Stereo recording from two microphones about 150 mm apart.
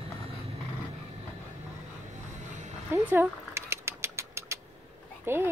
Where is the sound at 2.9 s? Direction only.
15° right (ahead or behind).